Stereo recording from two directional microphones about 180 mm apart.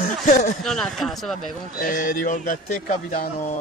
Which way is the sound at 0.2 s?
45° left (ahead or behind).